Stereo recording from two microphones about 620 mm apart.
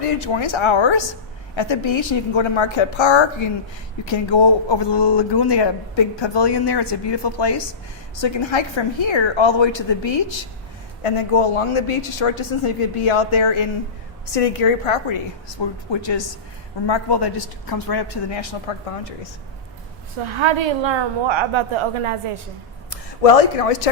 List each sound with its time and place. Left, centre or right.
0.0 s a woman's voice: left
11.0 s a woman's voice: left
15.9 s a woman's voice: left
20.3 s a woman's voice: right
22.9 s speech: left